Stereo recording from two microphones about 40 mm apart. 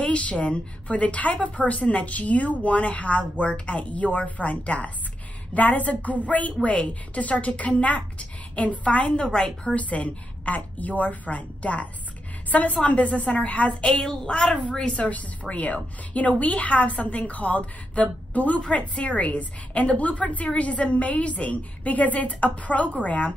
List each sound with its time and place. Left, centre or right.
0.0 s a woman's voice: left
9.8 s a woman's voice: left
14.0 s a woman's voice: centre
15.0 s a woman's voice: left
18.6 s a woman's voice: left